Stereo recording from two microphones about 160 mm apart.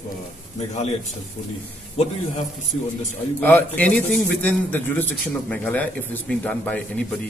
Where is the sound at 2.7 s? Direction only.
40° left (ahead or behind).